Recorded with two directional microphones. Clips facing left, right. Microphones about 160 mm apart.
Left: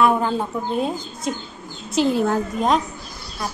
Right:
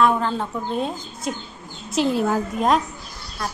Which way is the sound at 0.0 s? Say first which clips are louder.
Left 1 dB; 10° left (ahead or behind).